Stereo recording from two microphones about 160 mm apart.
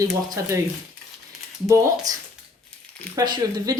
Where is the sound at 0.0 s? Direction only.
20° right (ahead or behind).